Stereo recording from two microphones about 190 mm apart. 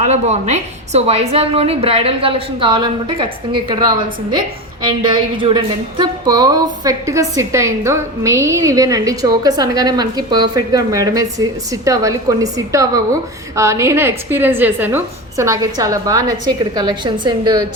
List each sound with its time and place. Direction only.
0.0 s a woman's voice: 35° right (ahead or behind)